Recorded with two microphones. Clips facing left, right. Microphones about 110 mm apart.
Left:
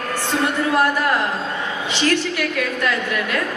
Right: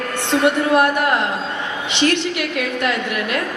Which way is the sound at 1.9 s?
20° right (ahead or behind).